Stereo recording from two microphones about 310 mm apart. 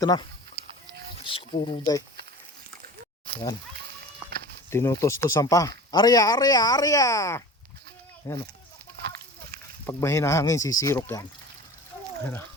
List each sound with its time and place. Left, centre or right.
0.0 s speech: centre
4.7 s speech: centre
9.8 s speech: centre